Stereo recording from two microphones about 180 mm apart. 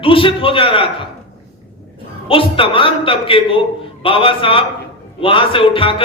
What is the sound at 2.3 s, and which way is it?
A man's voice, 30° left (ahead or behind).